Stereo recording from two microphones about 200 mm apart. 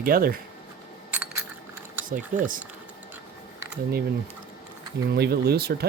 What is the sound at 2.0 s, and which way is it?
Speech, 40° right (ahead or behind).